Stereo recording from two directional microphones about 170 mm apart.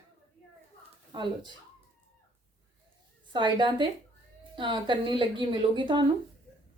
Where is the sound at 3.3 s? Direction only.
25° right (ahead or behind).